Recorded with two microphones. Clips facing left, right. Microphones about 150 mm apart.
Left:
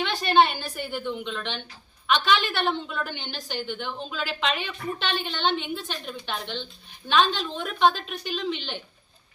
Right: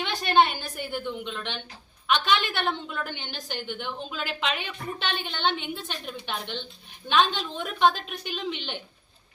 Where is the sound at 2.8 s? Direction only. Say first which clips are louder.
Left 2 dB; 5° right (ahead or behind).